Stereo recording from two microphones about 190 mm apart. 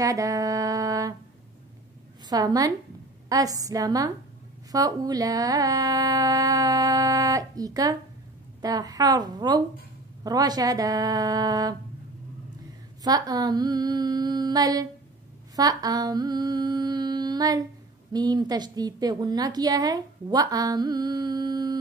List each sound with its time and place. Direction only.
0.0 s music: 15° right (ahead or behind)
2.2 s a woman's voice: 20° right (ahead or behind)
13.0 s a woman's voice: 20° right (ahead or behind)
15.5 s a sound: 20° right (ahead or behind)
18.1 s a woman's voice: 20° right (ahead or behind)